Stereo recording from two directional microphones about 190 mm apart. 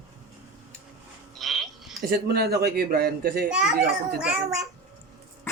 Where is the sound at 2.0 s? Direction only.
55° right (ahead or behind).